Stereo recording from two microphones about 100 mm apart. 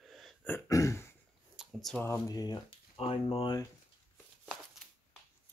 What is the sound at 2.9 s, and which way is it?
Speech, 75° left (ahead or behind).